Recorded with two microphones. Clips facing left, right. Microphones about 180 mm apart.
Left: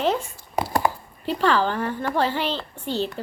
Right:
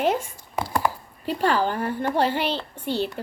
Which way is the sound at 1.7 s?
40° right (ahead or behind).